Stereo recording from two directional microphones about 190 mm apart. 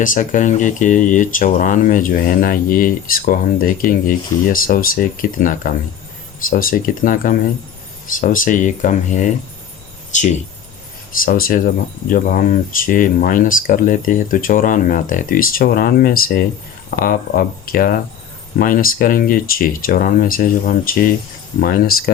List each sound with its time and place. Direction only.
0.0 s speech: 45° left (ahead or behind)